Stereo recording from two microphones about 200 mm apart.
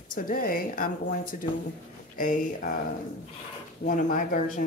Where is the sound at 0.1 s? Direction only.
45° left (ahead or behind).